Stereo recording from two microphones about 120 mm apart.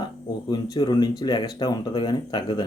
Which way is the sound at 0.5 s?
35° left (ahead or behind).